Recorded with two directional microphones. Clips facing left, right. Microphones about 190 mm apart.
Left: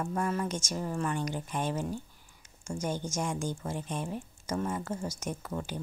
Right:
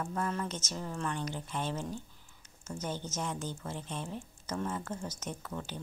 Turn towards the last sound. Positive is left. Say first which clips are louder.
# left 4 dB
turn(degrees=15)  # may be behind; listen again after turning